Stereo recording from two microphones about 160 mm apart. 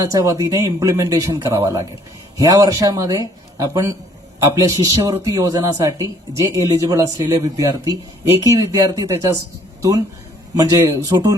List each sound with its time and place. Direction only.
0.0 s speech: 20° right (ahead or behind)
10.5 s speech: 20° right (ahead or behind)